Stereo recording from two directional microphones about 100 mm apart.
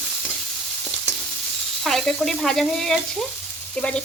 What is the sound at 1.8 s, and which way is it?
Speech, 5° left (ahead or behind).